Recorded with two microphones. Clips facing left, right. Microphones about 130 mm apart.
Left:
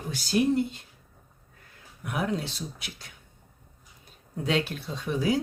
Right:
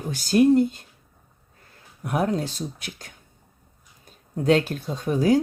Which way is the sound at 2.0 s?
40° right (ahead or behind).